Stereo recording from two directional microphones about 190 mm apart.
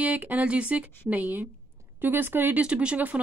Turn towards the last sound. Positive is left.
turn(degrees=-10)  # may be behind; listen again after turning